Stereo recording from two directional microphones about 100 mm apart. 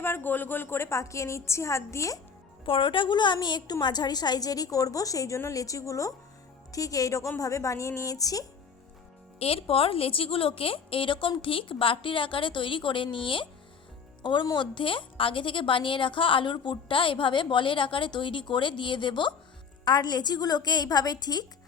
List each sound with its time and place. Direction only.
0.0 s a woman's voice: 20° left (ahead or behind)
2.6 s a woman's voice: 60° left (ahead or behind); by 8.4 s 35° left (ahead or behind)
9.4 s a woman's voice: 75° left (ahead or behind); by 21.4 s 40° left (ahead or behind)